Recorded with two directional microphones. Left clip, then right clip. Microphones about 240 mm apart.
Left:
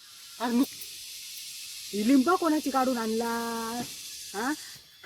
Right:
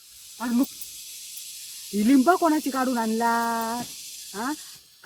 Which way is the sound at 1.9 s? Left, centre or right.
Right.